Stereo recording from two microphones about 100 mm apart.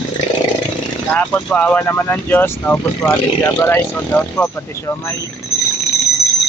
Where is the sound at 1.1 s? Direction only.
15° left (ahead or behind).